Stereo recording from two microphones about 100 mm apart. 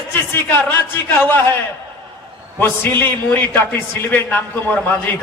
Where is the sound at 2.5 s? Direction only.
20° left (ahead or behind).